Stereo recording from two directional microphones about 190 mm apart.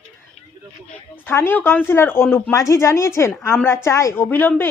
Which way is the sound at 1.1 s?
10° left (ahead or behind).